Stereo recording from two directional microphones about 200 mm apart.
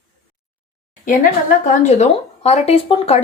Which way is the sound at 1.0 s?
40° left (ahead or behind).